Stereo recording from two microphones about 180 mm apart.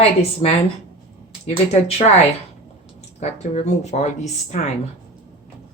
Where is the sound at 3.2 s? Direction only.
40° left (ahead or behind).